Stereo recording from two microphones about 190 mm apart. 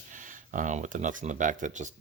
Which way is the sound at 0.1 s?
45° right (ahead or behind).